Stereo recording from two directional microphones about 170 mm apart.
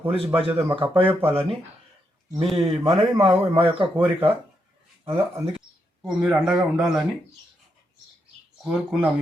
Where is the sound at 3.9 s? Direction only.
10° right (ahead or behind).